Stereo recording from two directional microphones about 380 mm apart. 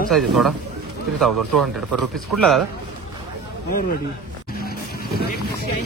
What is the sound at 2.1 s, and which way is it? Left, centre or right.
Speech, centre.